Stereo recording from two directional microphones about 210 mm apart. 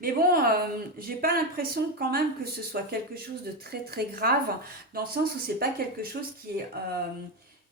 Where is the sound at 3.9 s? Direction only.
45° right (ahead or behind).